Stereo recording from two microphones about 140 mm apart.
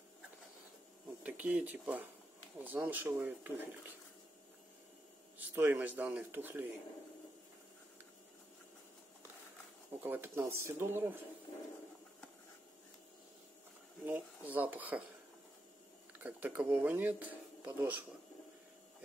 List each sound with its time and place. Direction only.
1.2 s speech: 10° right (ahead or behind)
5.4 s speech: 10° right (ahead or behind)
9.9 s speech: 15° right (ahead or behind)
14.0 s speech: 10° right (ahead or behind)
16.2 s speech: 10° right (ahead or behind)